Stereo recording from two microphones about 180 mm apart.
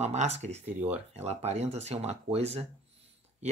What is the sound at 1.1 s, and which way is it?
Speech, 35° right (ahead or behind).